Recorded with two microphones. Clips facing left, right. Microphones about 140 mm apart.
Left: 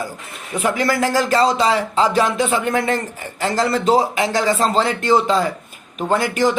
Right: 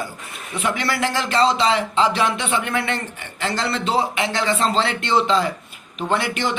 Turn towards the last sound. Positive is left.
turn(degrees=40)  # may be behind; listen again after turning